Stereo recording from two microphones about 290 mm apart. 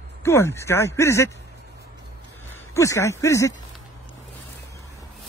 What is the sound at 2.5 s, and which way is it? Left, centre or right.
Speech, centre.